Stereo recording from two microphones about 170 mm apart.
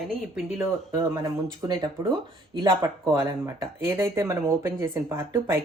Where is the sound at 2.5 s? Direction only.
20° right (ahead or behind).